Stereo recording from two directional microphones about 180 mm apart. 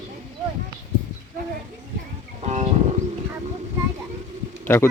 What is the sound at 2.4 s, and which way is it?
Music, 40° right (ahead or behind).